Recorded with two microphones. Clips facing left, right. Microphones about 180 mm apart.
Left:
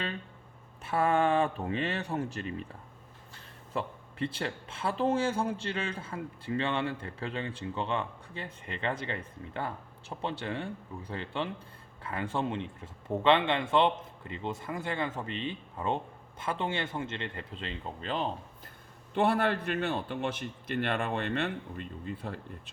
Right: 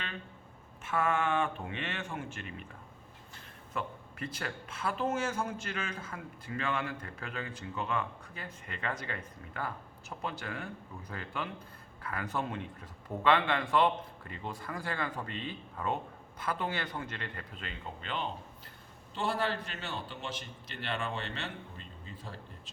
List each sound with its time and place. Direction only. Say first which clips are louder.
0.9 s speech: left 4 dB; 35° left (ahead or behind)
3.7 s speech: left 3 dB; 30° left (ahead or behind)
19.1 s a man's voice: left 6 dB; 60° left (ahead or behind)